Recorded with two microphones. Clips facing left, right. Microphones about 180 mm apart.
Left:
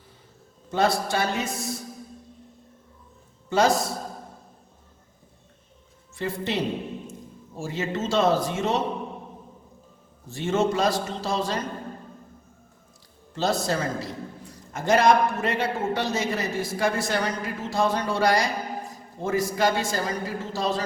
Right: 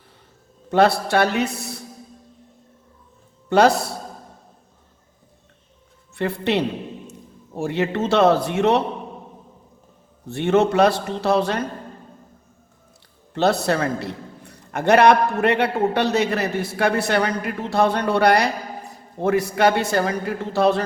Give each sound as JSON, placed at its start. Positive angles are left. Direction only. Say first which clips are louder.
{"t": 0.7, "sound": "a man's voice", "louder": "right 6 dB", "side_deg": -65}
{"t": 3.5, "sound": "a man's voice", "louder": "right 5 dB", "side_deg": -65}
{"t": 6.1, "sound": "a man's voice", "louder": "right 6 dB", "side_deg": -65}
{"t": 10.2, "sound": "a man's voice", "louder": "right 6 dB", "side_deg": -65}
{"t": 13.3, "sound": "a man's voice", "louder": "right 6 dB", "side_deg": -65}